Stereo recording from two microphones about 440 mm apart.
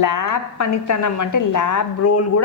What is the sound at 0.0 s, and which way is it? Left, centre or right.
A woman's voice, left.